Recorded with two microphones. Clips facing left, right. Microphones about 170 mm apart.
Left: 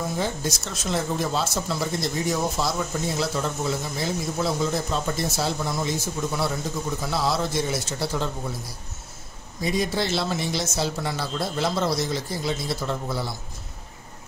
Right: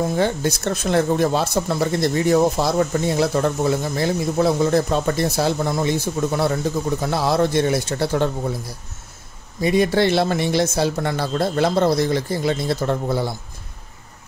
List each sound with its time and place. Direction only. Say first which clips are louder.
0.2 s speech: right 7 dB; 60° right (ahead or behind)
9.6 s speech: right 8 dB; 60° right (ahead or behind)